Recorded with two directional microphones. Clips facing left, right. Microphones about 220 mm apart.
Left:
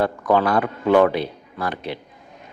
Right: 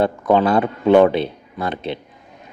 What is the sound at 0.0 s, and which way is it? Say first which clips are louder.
Speech: right 3 dB; 25° right (ahead or behind).